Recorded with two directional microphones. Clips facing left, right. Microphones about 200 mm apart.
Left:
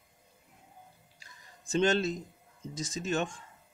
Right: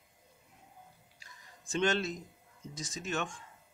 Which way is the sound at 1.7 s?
30° left (ahead or behind).